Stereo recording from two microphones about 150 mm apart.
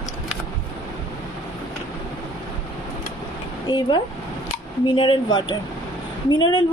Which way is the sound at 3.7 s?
30° left (ahead or behind).